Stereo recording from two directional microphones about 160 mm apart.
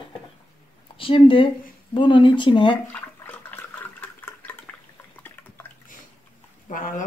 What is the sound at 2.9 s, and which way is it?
Water, 10° left (ahead or behind).